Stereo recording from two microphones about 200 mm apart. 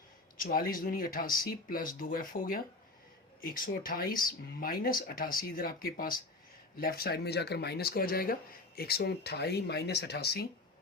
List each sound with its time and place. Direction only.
0.3 s speech: 45° left (ahead or behind)
4.1 s speech: 20° left (ahead or behind)
4.6 s speech: 45° left (ahead or behind)